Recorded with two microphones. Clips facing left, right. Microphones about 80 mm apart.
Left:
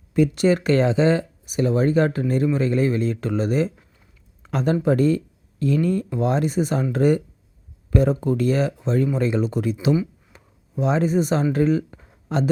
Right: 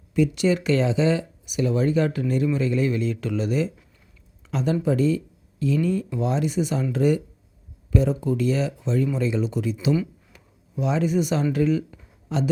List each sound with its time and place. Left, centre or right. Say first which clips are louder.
0.1 s speech: left 3 dB; left
10.3 s a sound: left 3 dB; left
11.5 s speech: left 2 dB; left